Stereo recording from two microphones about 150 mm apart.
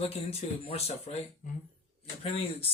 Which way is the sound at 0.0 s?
45° left (ahead or behind).